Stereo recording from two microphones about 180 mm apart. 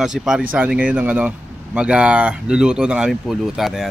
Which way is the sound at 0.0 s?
5° right (ahead or behind).